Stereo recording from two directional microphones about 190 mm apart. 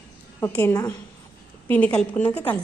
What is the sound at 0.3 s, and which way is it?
A woman's voice, 10° left (ahead or behind).